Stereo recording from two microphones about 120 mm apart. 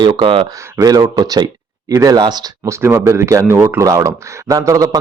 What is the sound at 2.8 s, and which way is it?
A man's voice, 25° right (ahead or behind).